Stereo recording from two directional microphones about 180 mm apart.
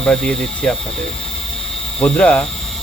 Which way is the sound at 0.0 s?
5° left (ahead or behind).